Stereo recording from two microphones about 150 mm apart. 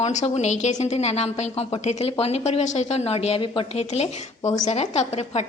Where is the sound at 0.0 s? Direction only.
50° left (ahead or behind).